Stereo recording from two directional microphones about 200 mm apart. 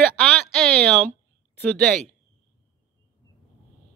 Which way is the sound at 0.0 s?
Centre (ahead or behind).